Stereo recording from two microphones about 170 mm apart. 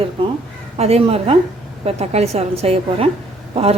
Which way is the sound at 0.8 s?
35° right (ahead or behind).